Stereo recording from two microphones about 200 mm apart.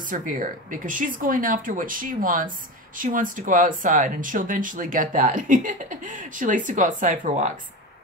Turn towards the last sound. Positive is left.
turn(degrees=-35)  # may be behind; listen again after turning